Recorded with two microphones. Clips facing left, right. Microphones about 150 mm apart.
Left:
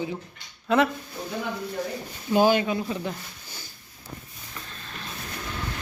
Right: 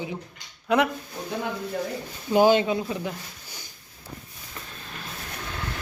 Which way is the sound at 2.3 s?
20° right (ahead or behind).